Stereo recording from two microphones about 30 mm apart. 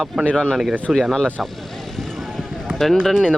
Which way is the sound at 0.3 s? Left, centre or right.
Left.